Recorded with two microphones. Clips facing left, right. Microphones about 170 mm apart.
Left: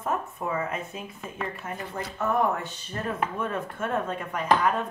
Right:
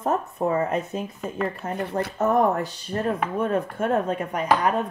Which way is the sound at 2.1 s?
40° right (ahead or behind).